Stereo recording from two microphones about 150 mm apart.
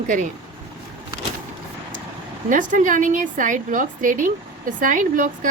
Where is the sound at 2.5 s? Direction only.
60° right (ahead or behind).